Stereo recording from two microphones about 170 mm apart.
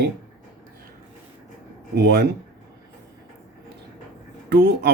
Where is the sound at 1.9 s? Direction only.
70° right (ahead or behind).